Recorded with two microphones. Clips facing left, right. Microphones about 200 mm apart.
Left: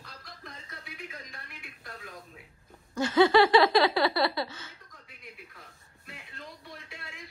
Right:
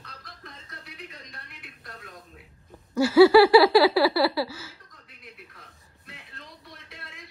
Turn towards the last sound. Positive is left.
turn(degrees=0)  # may be behind; listen again after turning